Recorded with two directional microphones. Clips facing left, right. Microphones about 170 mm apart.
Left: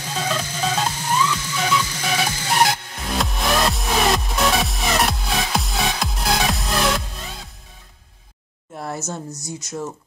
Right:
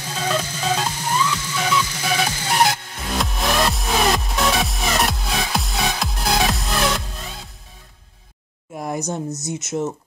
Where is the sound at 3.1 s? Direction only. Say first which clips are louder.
Even; centre (ahead or behind).